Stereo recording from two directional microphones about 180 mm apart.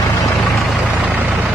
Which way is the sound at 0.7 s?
5° right (ahead or behind).